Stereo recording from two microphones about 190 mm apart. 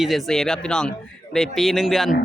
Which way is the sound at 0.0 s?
Centre (ahead or behind).